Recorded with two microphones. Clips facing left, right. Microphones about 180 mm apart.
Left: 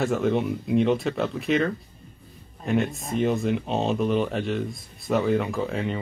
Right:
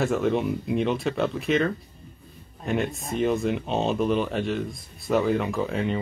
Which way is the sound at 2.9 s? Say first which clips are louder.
Even; centre (ahead or behind).